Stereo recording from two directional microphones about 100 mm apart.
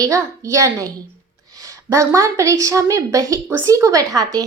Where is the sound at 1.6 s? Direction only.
30° right (ahead or behind).